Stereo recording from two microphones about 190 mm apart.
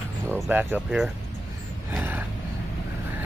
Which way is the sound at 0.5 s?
10° right (ahead or behind).